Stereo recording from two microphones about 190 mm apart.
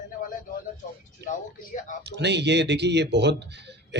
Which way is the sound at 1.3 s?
40° left (ahead or behind).